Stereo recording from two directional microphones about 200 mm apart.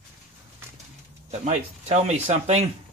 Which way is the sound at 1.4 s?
35° right (ahead or behind).